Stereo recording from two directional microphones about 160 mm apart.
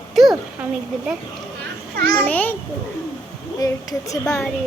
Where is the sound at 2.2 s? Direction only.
10° left (ahead or behind).